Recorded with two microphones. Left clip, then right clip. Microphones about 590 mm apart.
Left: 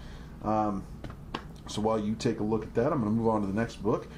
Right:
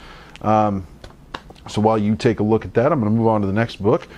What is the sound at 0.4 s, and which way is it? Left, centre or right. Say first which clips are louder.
Speech: right 12 dB; right.